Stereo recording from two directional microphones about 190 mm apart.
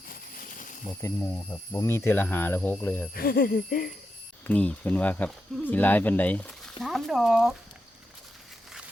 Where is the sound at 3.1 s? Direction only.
50° left (ahead or behind).